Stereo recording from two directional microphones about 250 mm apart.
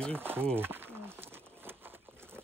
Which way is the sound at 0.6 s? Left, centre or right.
Centre.